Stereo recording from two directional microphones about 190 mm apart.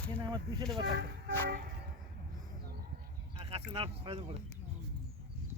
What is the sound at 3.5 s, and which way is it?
Speech, 30° right (ahead or behind).